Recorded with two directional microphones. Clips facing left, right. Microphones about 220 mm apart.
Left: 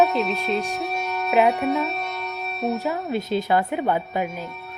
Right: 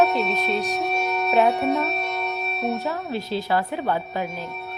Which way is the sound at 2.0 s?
55° right (ahead or behind).